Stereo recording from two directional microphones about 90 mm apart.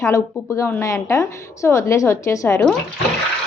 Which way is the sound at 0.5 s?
35° left (ahead or behind).